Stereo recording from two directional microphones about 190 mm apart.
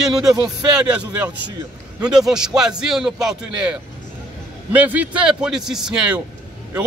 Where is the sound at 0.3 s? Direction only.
5° right (ahead or behind).